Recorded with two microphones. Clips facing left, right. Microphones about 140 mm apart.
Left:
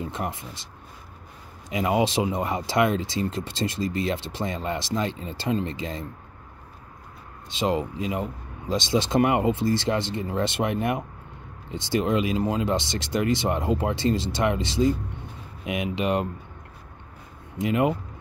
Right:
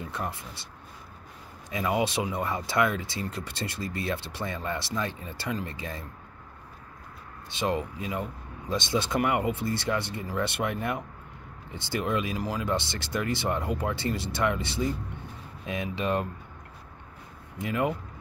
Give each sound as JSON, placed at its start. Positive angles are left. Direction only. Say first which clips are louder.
{"t": 0.0, "sound": "speech", "louder": "left 4 dB", "side_deg": 20}
{"t": 1.7, "sound": "speech", "louder": "left 4 dB", "side_deg": 20}
{"t": 7.4, "sound": "speech", "louder": "left 4 dB", "side_deg": 20}
{"t": 17.6, "sound": "speech", "louder": "left 5 dB", "side_deg": 20}